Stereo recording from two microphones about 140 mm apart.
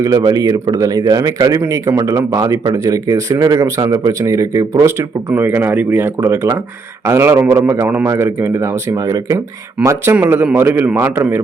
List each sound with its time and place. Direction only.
0.0 s a man's voice: 25° right (ahead or behind)